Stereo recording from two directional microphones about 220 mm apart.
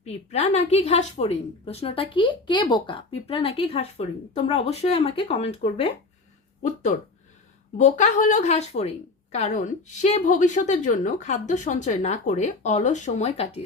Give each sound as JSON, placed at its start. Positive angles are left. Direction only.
{"t": 0.0, "sound": "a woman's voice", "side_deg": 30}
{"t": 7.8, "sound": "a woman's voice", "side_deg": 35}